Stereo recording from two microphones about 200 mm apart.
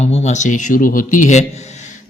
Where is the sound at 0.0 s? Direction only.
35° left (ahead or behind).